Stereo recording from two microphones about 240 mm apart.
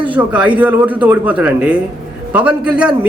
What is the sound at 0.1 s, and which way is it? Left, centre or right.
A man's voice, centre.